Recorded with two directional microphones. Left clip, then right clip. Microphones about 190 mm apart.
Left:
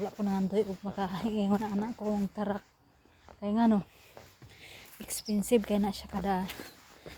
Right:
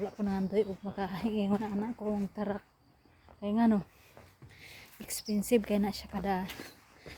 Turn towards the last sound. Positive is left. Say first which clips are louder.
# left 2 dB
turn(degrees=-5)  # may be behind; listen again after turning